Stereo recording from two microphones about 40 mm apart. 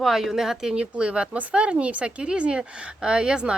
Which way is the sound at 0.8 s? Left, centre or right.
Right.